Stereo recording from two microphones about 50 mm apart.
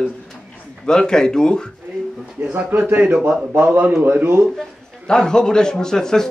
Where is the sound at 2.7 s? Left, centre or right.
Right.